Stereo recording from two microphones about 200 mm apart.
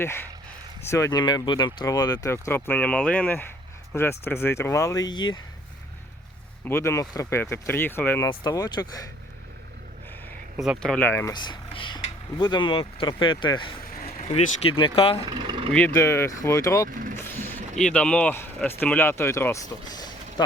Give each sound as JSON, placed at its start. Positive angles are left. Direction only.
{"t": 0.0, "sound": "speech", "side_deg": 10}
{"t": 6.7, "sound": "speech", "side_deg": 15}
{"t": 10.6, "sound": "speech", "side_deg": 0}
{"t": 15.2, "sound": "speech", "side_deg": -25}
{"t": 15.7, "sound": "speech", "side_deg": 10}